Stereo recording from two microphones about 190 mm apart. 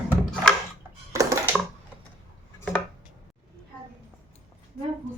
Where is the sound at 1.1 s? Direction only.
15° right (ahead or behind).